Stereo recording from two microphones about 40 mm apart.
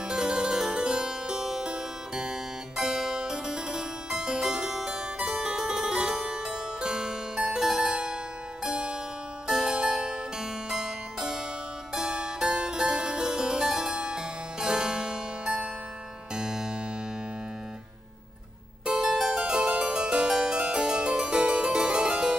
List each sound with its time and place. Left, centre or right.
0.1 s harpsichord: centre
7.9 s music: right
8.6 s harpsichord: right
16.3 s music: centre
18.9 s harpsichord: centre
19.4 s harpsichord: right